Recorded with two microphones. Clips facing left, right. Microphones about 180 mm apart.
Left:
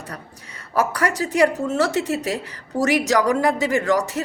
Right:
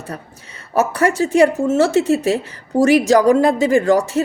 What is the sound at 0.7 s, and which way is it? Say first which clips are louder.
Speech: right 5 dB; 25° right (ahead or behind).